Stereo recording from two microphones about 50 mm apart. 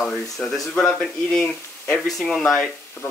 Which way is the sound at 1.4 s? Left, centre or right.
Left.